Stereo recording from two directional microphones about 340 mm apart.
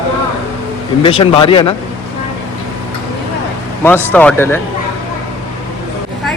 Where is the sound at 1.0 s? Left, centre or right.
Centre.